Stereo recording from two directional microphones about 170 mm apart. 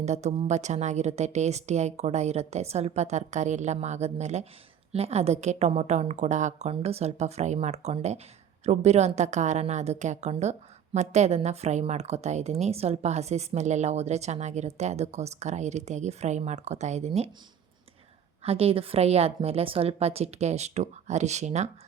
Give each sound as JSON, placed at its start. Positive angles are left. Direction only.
{"t": 0.0, "sound": "a woman's voice", "side_deg": -40}
{"t": 18.4, "sound": "a woman's voice", "side_deg": -35}